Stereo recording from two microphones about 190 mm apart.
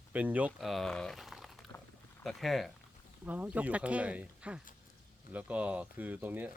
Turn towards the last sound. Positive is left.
turn(degrees=-10)  # may be behind; listen again after turning